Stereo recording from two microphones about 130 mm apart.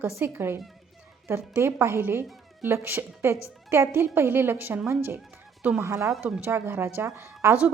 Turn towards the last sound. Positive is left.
turn(degrees=-20)  # may be behind; listen again after turning